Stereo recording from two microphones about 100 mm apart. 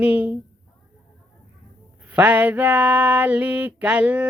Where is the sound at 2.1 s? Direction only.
15° right (ahead or behind).